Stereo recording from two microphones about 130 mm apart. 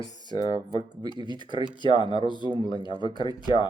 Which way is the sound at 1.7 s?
35° left (ahead or behind).